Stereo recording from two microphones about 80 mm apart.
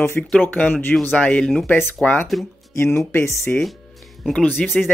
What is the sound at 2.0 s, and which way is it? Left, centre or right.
Speech, left.